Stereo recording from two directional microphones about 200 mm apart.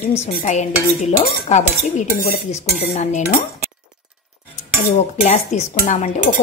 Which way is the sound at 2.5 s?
35° left (ahead or behind).